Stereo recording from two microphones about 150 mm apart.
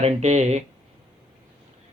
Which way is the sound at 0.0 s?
45° right (ahead or behind).